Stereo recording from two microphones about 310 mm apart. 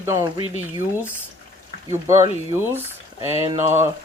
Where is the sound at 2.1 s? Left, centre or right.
Centre.